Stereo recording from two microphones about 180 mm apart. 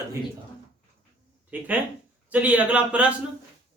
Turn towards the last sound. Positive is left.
turn(degrees=-5)  # may be behind; listen again after turning